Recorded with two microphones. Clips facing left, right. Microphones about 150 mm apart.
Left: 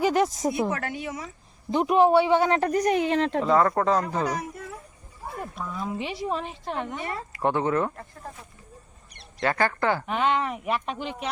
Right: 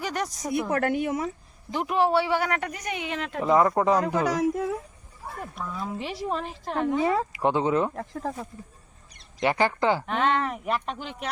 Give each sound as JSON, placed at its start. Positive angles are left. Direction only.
{"t": 0.0, "sound": "speech", "side_deg": 25}
{"t": 0.7, "sound": "a woman's voice", "side_deg": -55}
{"t": 1.7, "sound": "speech", "side_deg": 20}
{"t": 3.4, "sound": "speech", "side_deg": -15}
{"t": 4.0, "sound": "speech", "side_deg": -90}
{"t": 5.6, "sound": "a woman's voice", "side_deg": 0}
{"t": 7.3, "sound": "speech", "side_deg": -15}
{"t": 7.9, "sound": "speech", "side_deg": -90}
{"t": 9.4, "sound": "speech", "side_deg": -15}
{"t": 10.1, "sound": "a woman's voice", "side_deg": 0}